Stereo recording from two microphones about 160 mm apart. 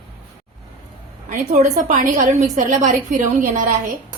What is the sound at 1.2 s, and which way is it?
A woman's voice, 50° right (ahead or behind).